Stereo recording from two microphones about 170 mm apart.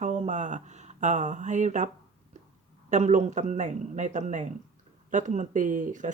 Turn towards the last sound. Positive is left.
turn(degrees=-50)  # may be behind; listen again after turning